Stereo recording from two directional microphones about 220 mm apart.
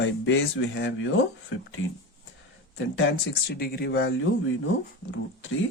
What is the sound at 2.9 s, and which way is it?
Speech, 50° left (ahead or behind).